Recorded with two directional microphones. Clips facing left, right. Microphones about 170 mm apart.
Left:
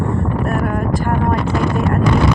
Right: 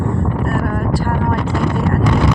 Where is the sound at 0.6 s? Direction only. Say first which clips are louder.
Even; 20° left (ahead or behind).